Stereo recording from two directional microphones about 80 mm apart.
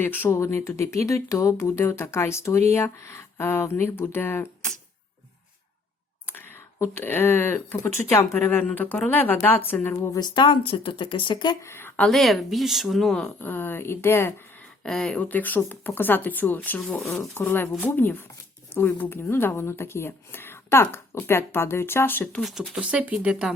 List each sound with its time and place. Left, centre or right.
0.0 s speech: left
6.2 s a sound: left
6.7 s speech: left
9.9 s speech: left
10.2 s speech: left
11.6 s a sound: left
12.0 s speech: centre
13.4 s speech: left
14.8 s speech: centre
15.2 s speech: left
22.4 s speech: centre
22.8 s speech: centre